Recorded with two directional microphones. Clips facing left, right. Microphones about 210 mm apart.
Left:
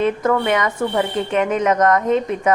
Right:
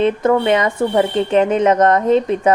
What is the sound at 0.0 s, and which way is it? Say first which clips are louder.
Speech: right 3 dB; 25° right (ahead or behind).